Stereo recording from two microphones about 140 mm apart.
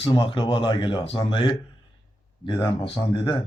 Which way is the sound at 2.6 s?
35° left (ahead or behind).